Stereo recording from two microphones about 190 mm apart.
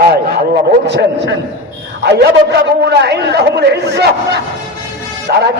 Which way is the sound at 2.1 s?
60° right (ahead or behind).